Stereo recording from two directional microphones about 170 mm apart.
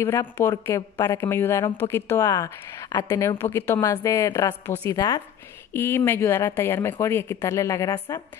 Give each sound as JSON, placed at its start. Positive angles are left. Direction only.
{"t": 0.4, "sound": "a woman's voice", "side_deg": 15}